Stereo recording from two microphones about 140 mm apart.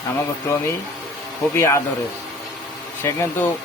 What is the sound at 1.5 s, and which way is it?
Speech, 20° left (ahead or behind).